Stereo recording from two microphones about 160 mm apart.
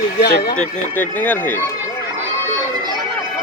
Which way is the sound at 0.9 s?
10° left (ahead or behind).